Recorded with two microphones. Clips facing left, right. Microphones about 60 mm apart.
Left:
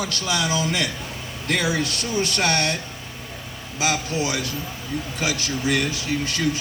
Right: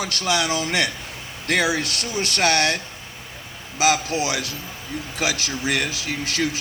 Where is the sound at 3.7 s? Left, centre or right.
Right.